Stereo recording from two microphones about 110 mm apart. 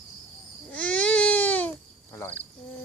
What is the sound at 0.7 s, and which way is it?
Crying, 10° left (ahead or behind).